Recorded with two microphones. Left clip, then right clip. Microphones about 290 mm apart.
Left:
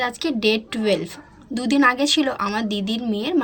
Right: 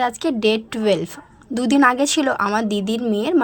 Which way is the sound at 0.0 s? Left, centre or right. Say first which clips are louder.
Right 2 dB; right.